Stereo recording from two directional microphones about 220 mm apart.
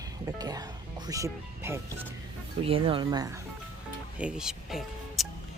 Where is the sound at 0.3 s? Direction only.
15° right (ahead or behind).